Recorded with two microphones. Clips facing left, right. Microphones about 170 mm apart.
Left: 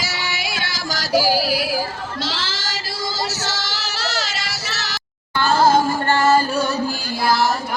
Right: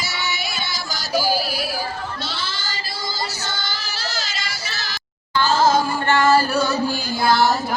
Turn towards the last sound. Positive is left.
turn(degrees=0)  # may be behind; listen again after turning